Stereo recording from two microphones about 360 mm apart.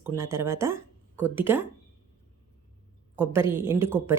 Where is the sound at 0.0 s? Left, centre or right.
Centre.